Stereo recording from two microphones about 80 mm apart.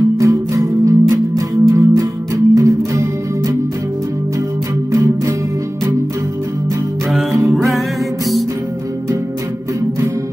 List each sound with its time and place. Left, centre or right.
0.2 s music: right
4.9 s music: right